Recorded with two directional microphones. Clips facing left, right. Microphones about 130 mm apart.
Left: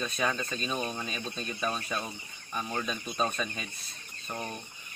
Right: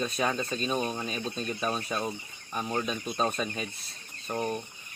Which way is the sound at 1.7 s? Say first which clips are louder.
Right 3 dB; 25° right (ahead or behind).